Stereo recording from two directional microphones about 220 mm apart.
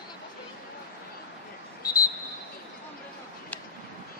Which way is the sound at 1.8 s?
15° left (ahead or behind).